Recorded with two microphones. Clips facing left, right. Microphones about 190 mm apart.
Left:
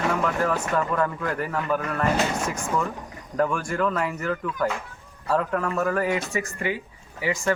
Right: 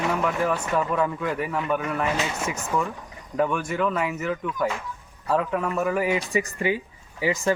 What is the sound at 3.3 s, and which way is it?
Speech, 5° right (ahead or behind).